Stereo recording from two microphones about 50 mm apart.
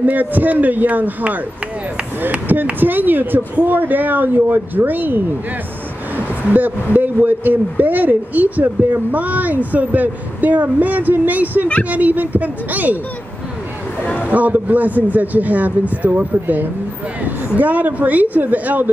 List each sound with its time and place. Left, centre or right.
0.0 s speech: right
2.8 s speech: right
14.0 s a sound: left
14.3 s speech: right